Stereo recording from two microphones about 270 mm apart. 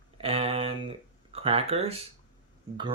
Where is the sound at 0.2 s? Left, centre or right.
Right.